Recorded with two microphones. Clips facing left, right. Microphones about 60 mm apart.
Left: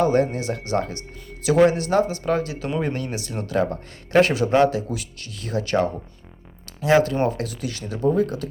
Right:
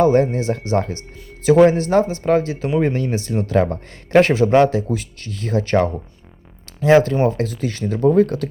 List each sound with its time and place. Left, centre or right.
0.0 s a man's voice: right